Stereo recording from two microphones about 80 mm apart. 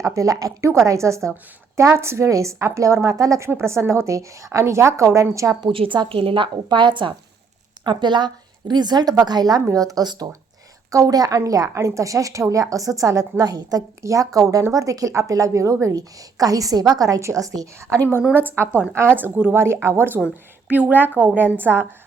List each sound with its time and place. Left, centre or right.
0.0 s a woman's voice: right
5.5 s a woman's voice: right
7.9 s a woman's voice: right
18.3 s a woman's voice: right
19.5 s a woman's voice: right